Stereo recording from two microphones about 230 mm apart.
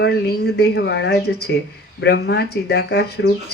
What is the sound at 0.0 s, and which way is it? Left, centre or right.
Speech, left.